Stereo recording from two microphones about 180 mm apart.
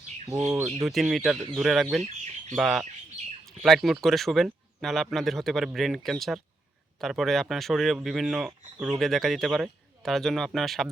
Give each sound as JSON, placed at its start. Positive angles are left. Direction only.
{"t": 0.3, "sound": "speech", "side_deg": -10}
{"t": 2.0, "sound": "chicken", "side_deg": -40}
{"t": 2.6, "sound": "speech", "side_deg": 0}
{"t": 3.4, "sound": "bird", "side_deg": 0}
{"t": 4.0, "sound": "speech", "side_deg": 0}